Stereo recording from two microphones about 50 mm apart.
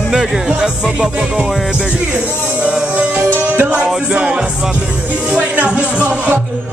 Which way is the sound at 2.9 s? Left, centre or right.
Right.